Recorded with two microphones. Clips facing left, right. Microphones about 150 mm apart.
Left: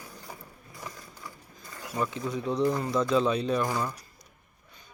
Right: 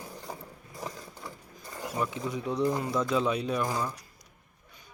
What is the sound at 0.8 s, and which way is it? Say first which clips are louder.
Roaring cats: right 4 dB; 25° right (ahead or behind).